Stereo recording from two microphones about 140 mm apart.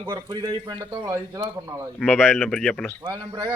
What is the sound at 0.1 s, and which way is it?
A man's voice, 30° right (ahead or behind).